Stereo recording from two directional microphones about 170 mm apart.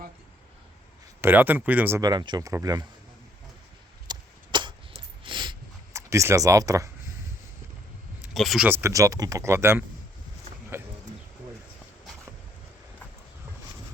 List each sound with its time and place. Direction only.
1.2 s speech: 10° right (ahead or behind)
2.0 s speech: 25° right (ahead or behind)
4.0 s a sound: 25° right (ahead or behind)
6.0 s speech: 15° right (ahead or behind)
8.3 s speech: centre (ahead or behind); by 10.9 s 15° right (ahead or behind)